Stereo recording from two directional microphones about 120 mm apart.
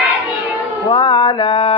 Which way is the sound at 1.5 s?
45° left (ahead or behind).